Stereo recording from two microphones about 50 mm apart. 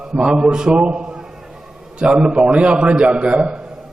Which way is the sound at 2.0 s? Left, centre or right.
Centre.